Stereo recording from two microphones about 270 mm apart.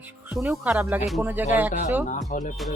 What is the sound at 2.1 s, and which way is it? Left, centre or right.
Speech, left.